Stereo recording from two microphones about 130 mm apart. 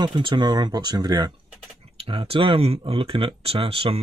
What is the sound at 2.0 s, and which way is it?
Speech, 45° right (ahead or behind).